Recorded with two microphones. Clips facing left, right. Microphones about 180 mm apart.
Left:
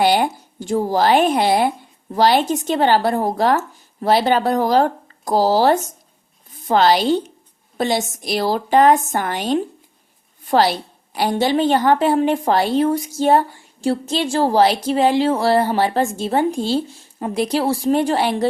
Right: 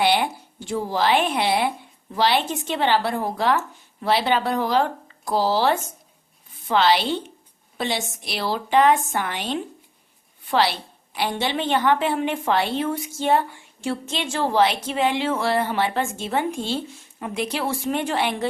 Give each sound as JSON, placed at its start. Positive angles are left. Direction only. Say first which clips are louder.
{"t": 0.0, "sound": "a woman's voice", "louder": "left 4 dB", "side_deg": 40}